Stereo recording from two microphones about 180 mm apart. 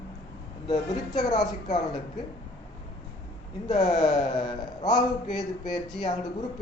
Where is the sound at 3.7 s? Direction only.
25° left (ahead or behind).